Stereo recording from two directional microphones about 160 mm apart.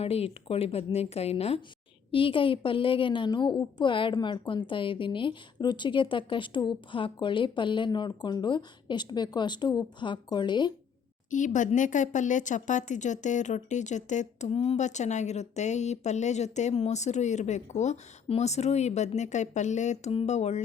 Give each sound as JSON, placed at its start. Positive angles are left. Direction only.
{"t": 0.0, "sound": "a woman's voice", "side_deg": 40}
{"t": 11.3, "sound": "speech", "side_deg": 50}